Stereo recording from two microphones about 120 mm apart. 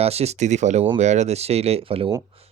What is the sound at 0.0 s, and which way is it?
Speech, 60° right (ahead or behind).